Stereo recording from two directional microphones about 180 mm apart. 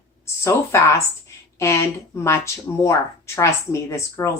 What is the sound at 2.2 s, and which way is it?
Speech, 15° left (ahead or behind).